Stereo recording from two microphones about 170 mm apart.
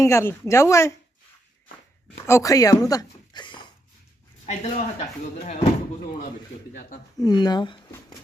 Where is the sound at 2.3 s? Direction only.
20° left (ahead or behind).